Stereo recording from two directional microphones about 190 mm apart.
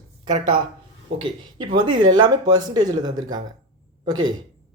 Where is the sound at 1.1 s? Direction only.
30° right (ahead or behind).